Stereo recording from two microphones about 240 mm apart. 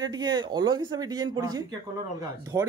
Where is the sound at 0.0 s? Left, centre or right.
Centre.